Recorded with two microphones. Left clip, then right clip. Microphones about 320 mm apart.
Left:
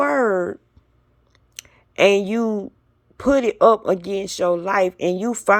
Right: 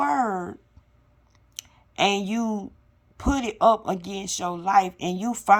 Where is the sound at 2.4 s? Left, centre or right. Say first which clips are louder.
Left 7 dB; left.